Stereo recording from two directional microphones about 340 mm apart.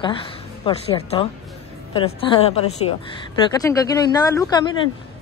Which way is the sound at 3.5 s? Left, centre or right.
Centre.